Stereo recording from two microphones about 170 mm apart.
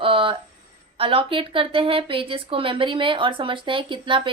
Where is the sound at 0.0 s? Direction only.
30° right (ahead or behind).